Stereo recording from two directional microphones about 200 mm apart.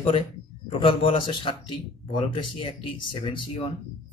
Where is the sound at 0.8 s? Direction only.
25° left (ahead or behind).